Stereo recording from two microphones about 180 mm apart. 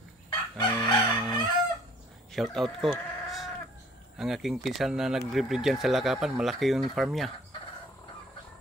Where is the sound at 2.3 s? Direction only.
Centre (ahead or behind).